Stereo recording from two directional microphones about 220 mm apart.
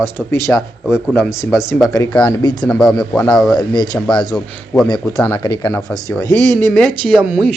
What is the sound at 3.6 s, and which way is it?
Speech, 20° left (ahead or behind).